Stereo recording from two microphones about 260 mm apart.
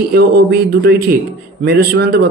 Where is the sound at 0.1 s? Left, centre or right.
Right.